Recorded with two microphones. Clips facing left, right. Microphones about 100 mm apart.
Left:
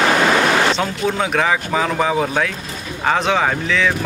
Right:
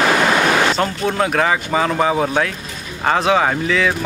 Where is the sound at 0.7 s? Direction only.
Centre (ahead or behind).